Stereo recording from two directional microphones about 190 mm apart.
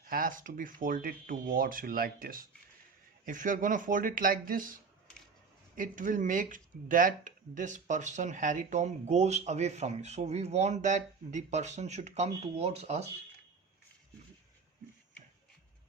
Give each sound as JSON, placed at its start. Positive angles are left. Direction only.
{"t": 0.0, "sound": "speech", "side_deg": -45}